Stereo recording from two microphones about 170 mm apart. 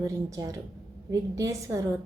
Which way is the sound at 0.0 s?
20° right (ahead or behind).